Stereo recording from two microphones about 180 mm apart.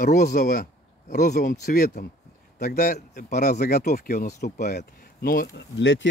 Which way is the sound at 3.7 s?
55° left (ahead or behind).